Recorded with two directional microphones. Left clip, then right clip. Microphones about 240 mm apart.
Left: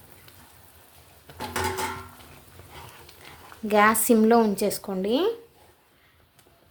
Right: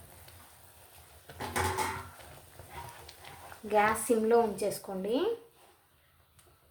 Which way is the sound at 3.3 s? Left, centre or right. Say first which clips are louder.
Left 3 dB; centre.